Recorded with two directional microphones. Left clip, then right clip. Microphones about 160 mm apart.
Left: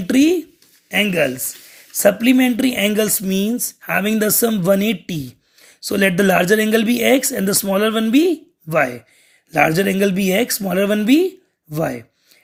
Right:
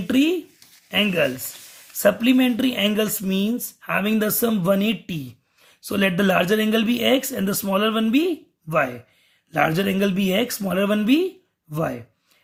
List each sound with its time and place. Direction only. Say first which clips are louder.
0.1 s speech: left 5 dB; 25° left (ahead or behind)